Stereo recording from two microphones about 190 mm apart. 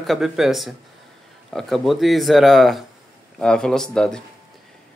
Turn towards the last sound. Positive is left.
turn(degrees=5)  # may be behind; listen again after turning